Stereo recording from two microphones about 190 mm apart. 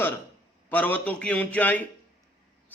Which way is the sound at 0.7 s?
10° left (ahead or behind).